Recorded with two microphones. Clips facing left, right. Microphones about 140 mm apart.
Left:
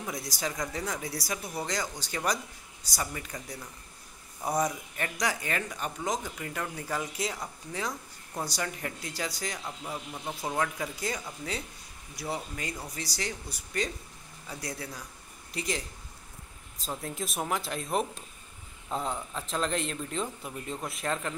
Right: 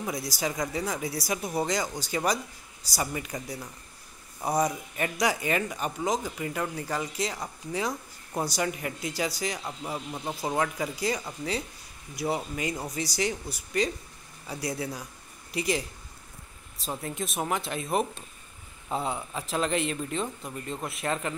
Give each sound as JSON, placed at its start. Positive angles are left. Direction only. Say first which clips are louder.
{"t": 0.0, "sound": "speech", "louder": "right 4 dB", "side_deg": -5}
{"t": 1.3, "sound": "speech", "louder": "right 6 dB", "side_deg": -15}
{"t": 10.6, "sound": "speech", "louder": "right 3 dB", "side_deg": -5}
{"t": 12.2, "sound": "speech", "louder": "right 6 dB", "side_deg": -15}
{"t": 14.5, "sound": "speech", "louder": "right 6 dB", "side_deg": -10}
{"t": 17.0, "sound": "speech", "louder": "right 2 dB", "side_deg": 0}